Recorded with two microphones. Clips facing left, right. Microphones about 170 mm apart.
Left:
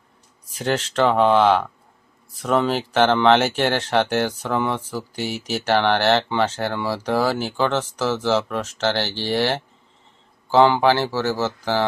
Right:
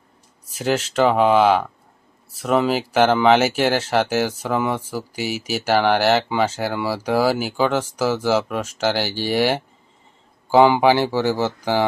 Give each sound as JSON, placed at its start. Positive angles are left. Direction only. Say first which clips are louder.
{"t": 0.5, "sound": "speech", "louder": "right 2 dB", "side_deg": -5}